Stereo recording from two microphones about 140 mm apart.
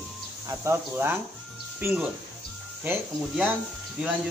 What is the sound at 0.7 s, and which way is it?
Speech, 15° right (ahead or behind).